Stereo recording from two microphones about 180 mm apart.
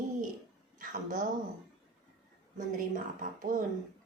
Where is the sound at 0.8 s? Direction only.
50° right (ahead or behind).